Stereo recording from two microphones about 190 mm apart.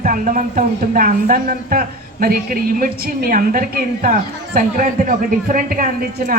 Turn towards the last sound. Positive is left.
turn(degrees=-45)  # may be behind; listen again after turning